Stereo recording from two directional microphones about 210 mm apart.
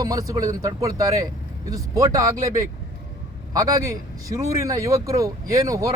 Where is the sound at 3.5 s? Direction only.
15° right (ahead or behind).